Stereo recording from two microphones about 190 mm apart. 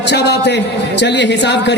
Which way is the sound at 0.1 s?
65° left (ahead or behind).